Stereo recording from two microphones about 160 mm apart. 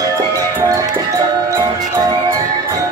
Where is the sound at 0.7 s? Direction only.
20° right (ahead or behind).